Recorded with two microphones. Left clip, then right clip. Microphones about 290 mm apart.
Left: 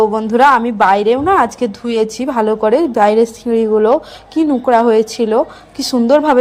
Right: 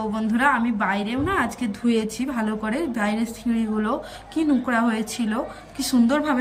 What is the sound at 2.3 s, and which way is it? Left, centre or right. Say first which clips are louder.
Speech: left 17 dB; left.